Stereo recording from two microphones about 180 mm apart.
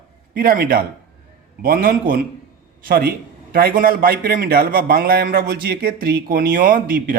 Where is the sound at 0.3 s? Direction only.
55° right (ahead or behind).